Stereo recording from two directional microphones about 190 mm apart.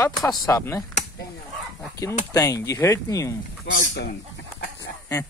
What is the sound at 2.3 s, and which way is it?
Speech, 15° left (ahead or behind).